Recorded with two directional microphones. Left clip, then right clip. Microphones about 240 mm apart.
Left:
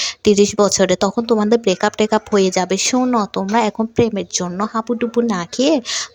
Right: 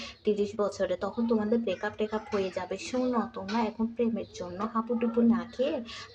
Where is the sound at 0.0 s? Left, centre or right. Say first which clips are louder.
Left 15 dB; left.